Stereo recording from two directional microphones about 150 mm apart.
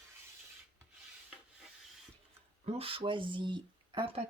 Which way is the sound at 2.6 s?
40° right (ahead or behind).